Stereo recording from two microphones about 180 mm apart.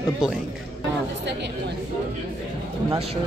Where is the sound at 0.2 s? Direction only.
5° right (ahead or behind).